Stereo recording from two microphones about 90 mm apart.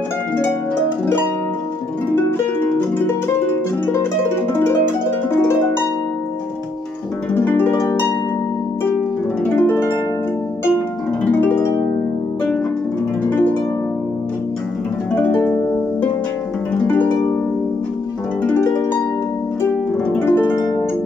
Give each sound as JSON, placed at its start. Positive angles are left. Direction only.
{"t": 2.1, "sound": "harp", "side_deg": 25}
{"t": 5.3, "sound": "harp", "side_deg": 30}
{"t": 7.3, "sound": "harp", "side_deg": 25}
{"t": 7.8, "sound": "harp", "side_deg": 35}
{"t": 9.6, "sound": "harp", "side_deg": 25}
{"t": 11.3, "sound": "harp", "side_deg": 20}
{"t": 13.3, "sound": "harp", "side_deg": 20}
{"t": 15.1, "sound": "harp", "side_deg": 20}
{"t": 16.8, "sound": "harp", "side_deg": 20}
{"t": 18.5, "sound": "harp", "side_deg": 25}
{"t": 20.1, "sound": "harp", "side_deg": 20}